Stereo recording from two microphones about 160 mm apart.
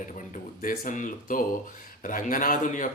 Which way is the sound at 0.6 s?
55° left (ahead or behind).